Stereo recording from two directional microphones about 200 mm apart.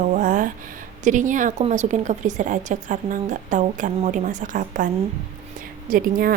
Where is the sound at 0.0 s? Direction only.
40° right (ahead or behind).